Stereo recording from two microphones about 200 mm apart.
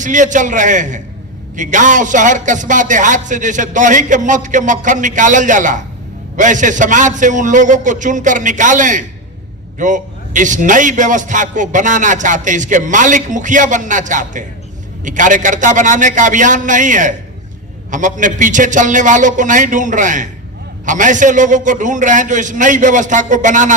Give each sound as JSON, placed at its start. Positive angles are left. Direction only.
{"t": 0.0, "sound": "a man's voice", "side_deg": -40}